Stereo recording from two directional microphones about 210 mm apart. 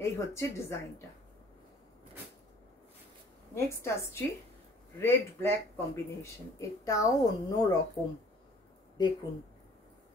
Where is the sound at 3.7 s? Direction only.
15° left (ahead or behind).